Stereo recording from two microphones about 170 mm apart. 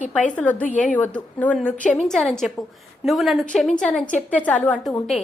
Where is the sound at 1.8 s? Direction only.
45° left (ahead or behind).